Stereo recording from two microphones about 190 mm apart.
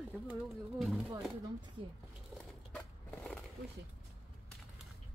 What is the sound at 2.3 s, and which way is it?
Skateboard, 5° left (ahead or behind).